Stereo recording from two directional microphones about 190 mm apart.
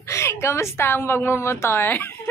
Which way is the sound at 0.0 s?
15° left (ahead or behind).